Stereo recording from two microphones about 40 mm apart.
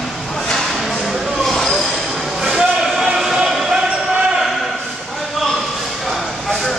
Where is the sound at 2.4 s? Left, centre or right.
Centre.